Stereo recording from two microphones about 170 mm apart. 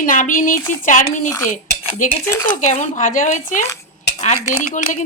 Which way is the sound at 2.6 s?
45° left (ahead or behind).